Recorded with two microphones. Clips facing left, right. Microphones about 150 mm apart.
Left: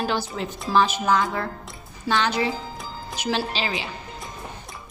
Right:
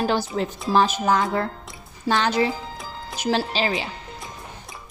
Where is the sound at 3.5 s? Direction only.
45° right (ahead or behind).